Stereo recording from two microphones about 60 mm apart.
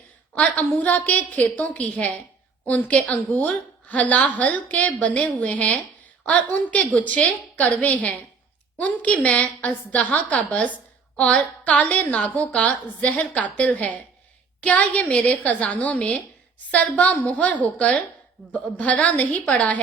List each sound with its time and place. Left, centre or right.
0.3 s a woman's voice: left